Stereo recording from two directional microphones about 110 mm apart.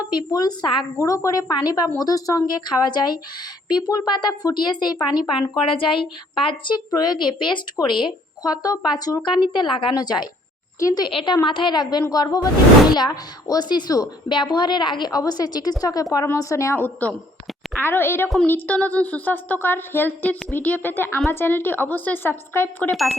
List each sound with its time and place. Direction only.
0.1 s a woman's voice: 40° left (ahead or behind)
0.9 s a woman's voice: 30° left (ahead or behind); by 6.8 s 50° left (ahead or behind)
6.9 s a woman's voice: 40° left (ahead or behind)
11.0 s a woman's voice: 50° left (ahead or behind); by 22.9 s 20° left (ahead or behind)
22.9 s speech: centre (ahead or behind)